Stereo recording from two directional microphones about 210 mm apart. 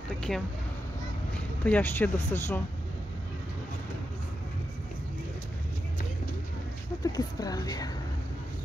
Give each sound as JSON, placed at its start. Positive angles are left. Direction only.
{"t": 0.3, "sound": "speech", "side_deg": 0}
{"t": 1.6, "sound": "speech", "side_deg": 10}
{"t": 7.0, "sound": "speech", "side_deg": 20}